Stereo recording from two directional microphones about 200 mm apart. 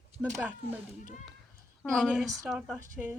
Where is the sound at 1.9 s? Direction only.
Centre (ahead or behind).